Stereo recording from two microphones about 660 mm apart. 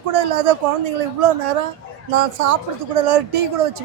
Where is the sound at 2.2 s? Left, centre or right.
Right.